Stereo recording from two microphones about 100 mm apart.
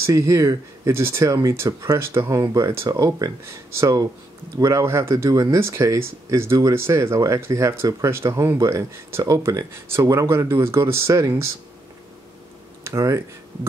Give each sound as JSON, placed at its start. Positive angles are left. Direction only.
{"t": 0.0, "sound": "speech", "side_deg": -30}
{"t": 2.0, "sound": "speech", "side_deg": -25}
{"t": 2.4, "sound": "speech", "side_deg": -40}
{"t": 12.8, "sound": "speech", "side_deg": -30}